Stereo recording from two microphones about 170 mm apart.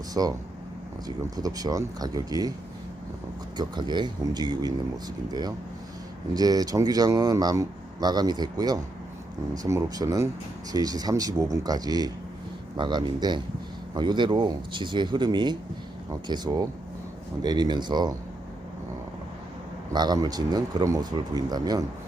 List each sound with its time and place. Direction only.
0.1 s a man's voice: 20° right (ahead or behind)
3.6 s a man's voice: 25° right (ahead or behind)
19.9 s a man's voice: 25° right (ahead or behind)